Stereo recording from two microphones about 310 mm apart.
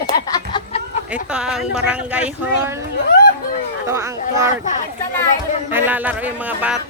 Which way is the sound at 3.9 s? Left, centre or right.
Centre.